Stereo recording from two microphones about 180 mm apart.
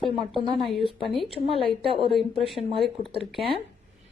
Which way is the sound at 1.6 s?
30° right (ahead or behind).